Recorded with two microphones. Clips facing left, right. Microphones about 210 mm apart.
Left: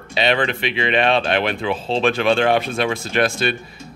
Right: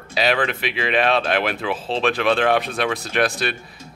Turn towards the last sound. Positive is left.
turn(degrees=0)  # may be behind; listen again after turning